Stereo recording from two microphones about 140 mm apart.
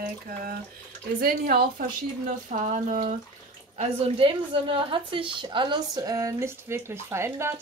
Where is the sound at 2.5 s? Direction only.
65° right (ahead or behind).